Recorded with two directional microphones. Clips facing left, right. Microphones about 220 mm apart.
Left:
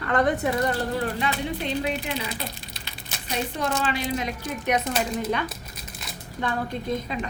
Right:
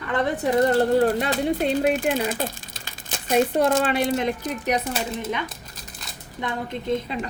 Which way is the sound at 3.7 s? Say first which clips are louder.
Right 5 dB; 90° right.